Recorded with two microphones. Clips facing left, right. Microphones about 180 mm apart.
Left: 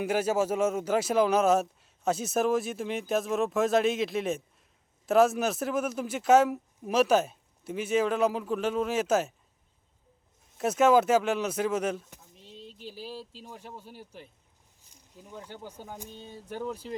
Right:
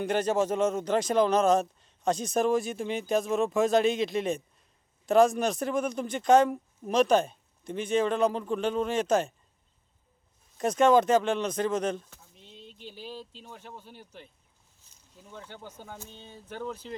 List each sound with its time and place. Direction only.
0.0 s speech: 5° left (ahead or behind)
10.6 s speech: 5° left (ahead or behind)
16.0 s a sound: 40° left (ahead or behind)
16.3 s speech: 10° left (ahead or behind)